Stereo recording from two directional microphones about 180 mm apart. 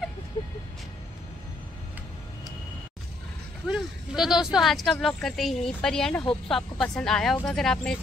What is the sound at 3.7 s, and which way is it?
Speech, centre (ahead or behind).